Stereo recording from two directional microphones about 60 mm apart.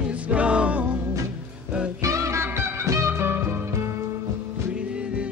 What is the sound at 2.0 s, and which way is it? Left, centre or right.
Music, right.